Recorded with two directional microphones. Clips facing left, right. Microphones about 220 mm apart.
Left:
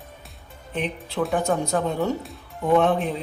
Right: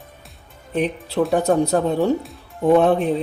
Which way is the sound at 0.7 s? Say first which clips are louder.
Right 6 dB; 40° right (ahead or behind).